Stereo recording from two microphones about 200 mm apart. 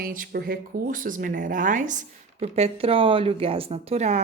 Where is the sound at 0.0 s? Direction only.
45° right (ahead or behind).